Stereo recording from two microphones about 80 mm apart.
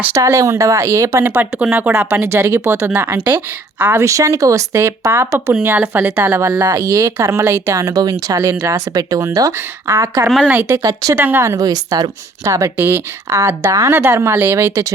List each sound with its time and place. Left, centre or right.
0.1 s speech: right
1.6 s speech: centre
2.2 s a woman's voice: right
4.0 s speech: right
5.5 s a woman's voice: right
6.7 s a woman's voice: right
10.4 s a woman's voice: right
10.7 s speech: right
11.2 s a woman's voice: right
11.4 s a woman's voice: right
12.7 s speech: right